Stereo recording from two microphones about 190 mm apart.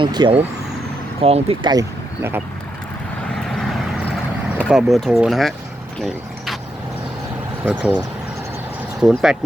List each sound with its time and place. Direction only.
0.0 s speech: 25° right (ahead or behind)
3.3 s boat: centre (ahead or behind)
6.0 s vehicle: centre (ahead or behind)
7.6 s speech: 10° right (ahead or behind)